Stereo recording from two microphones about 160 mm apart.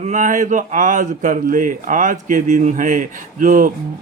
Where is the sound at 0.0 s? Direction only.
55° right (ahead or behind).